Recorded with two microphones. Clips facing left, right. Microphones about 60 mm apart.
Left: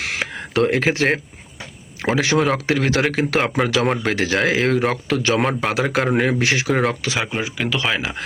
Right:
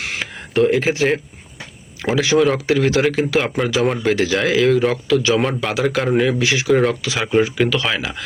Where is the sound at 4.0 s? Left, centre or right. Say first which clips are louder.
Right 2 dB; left.